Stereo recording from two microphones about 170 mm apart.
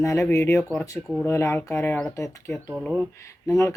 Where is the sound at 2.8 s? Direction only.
Centre (ahead or behind).